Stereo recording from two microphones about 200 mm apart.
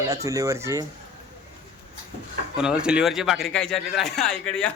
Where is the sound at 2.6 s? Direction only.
5° right (ahead or behind).